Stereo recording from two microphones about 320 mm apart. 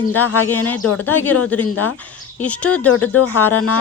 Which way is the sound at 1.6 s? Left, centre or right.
Left.